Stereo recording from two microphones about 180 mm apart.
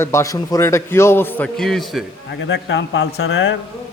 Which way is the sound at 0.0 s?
15° left (ahead or behind).